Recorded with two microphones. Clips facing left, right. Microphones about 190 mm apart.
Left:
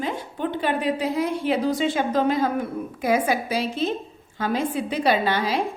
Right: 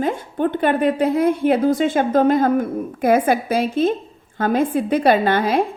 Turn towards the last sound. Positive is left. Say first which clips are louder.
# right 6 dB
turn(degrees=-50)  # may be behind; listen again after turning